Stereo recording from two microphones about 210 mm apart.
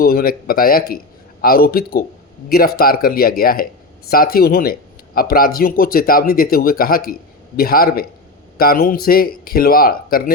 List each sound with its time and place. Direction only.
0.0 s speech: 45° left (ahead or behind)